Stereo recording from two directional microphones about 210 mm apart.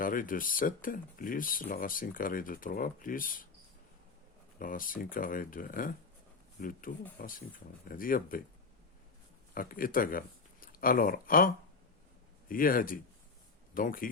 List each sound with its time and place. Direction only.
0.0 s speech: 40° left (ahead or behind)
4.6 s speech: 40° left (ahead or behind)
9.6 s speech: 40° left (ahead or behind)